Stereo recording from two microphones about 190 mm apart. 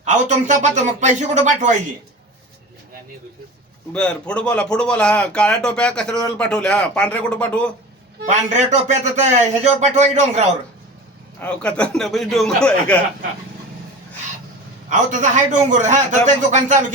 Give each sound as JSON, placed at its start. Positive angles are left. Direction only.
{"t": 0.0, "sound": "speech", "side_deg": -40}
{"t": 3.9, "sound": "speech", "side_deg": 5}
{"t": 8.2, "sound": "speech", "side_deg": -40}
{"t": 11.3, "sound": "speech", "side_deg": 5}
{"t": 14.8, "sound": "speech", "side_deg": -40}